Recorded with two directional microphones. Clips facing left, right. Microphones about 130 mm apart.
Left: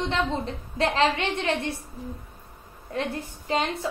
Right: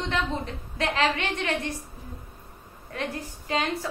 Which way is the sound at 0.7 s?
30° left (ahead or behind).